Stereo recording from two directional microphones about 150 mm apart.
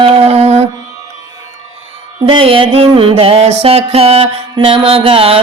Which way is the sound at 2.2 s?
35° right (ahead or behind).